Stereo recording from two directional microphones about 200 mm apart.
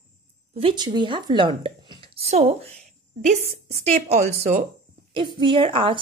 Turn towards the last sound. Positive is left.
turn(degrees=-25)  # may be behind; listen again after turning